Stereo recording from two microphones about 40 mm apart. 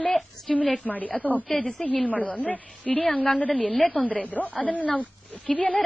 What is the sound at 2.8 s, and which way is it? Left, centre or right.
A woman's voice, left.